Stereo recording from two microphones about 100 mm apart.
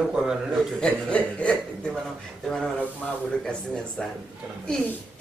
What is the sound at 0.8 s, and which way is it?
A woman's voice, 10° left (ahead or behind).